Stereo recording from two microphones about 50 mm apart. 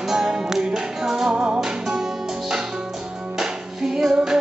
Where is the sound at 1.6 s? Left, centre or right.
Centre.